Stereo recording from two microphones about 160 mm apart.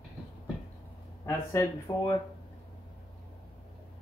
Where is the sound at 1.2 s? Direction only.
15° left (ahead or behind).